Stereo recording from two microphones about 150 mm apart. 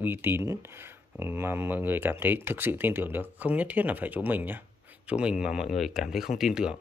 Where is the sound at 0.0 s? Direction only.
15° right (ahead or behind).